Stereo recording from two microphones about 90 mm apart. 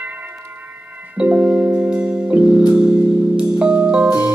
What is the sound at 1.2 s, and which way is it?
Music, 15° right (ahead or behind).